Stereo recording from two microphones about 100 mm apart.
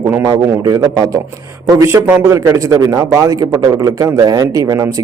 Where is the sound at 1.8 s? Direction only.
25° right (ahead or behind).